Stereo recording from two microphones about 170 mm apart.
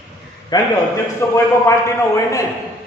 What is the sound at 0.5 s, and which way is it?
Speech, 25° left (ahead or behind).